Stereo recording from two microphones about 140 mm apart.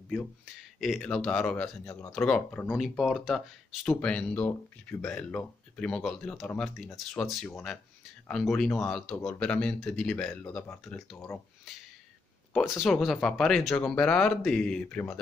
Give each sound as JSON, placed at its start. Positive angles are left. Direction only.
{"t": 0.7, "sound": "speech", "side_deg": 0}
{"t": 1.9, "sound": "speech", "side_deg": 25}
{"t": 2.1, "sound": "speech", "side_deg": 5}
{"t": 12.5, "sound": "speech", "side_deg": 0}